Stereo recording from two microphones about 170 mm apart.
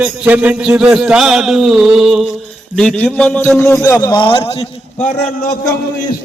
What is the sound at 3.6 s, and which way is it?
Speech, 15° left (ahead or behind).